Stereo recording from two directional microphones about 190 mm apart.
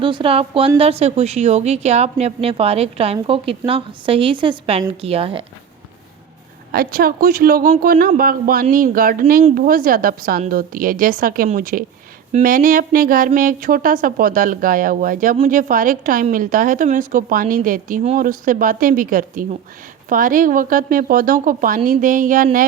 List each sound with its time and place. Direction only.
0.0 s a woman's voice: 25° right (ahead or behind)
6.7 s speech: 50° right (ahead or behind)